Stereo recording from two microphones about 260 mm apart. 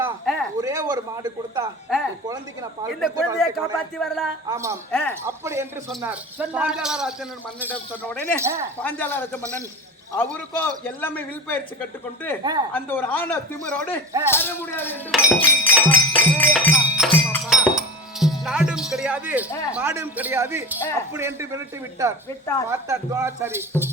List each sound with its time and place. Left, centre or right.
0.0 s speech: centre
3.2 s a man's voice: centre
4.4 s speech: centre
4.9 s a man's voice: centre
5.2 s a man's voice: centre
8.4 s speech: centre
8.8 s speech: centre
12.4 s speech: centre
12.7 s a man's voice: centre
15.9 s music: centre
19.5 s speech: centre
19.7 s speech: centre